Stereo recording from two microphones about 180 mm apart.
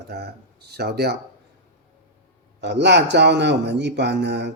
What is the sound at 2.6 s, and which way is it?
A man's voice, 75° right (ahead or behind).